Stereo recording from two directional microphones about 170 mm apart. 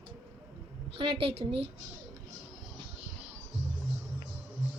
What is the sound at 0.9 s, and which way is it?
Speech, 30° right (ahead or behind).